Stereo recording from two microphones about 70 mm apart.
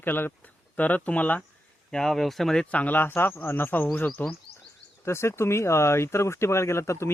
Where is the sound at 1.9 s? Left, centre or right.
Centre.